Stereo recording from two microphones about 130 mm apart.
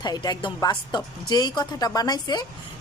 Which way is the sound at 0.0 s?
30° left (ahead or behind).